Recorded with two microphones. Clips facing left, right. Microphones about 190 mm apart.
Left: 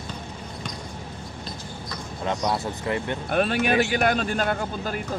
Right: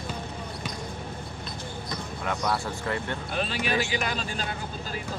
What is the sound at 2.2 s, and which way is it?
Speech, 20° left (ahead or behind).